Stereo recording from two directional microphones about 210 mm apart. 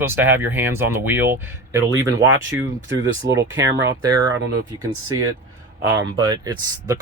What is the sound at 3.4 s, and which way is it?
Speech, 60° right (ahead or behind).